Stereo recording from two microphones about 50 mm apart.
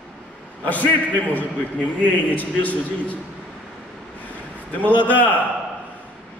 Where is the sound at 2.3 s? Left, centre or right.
Left.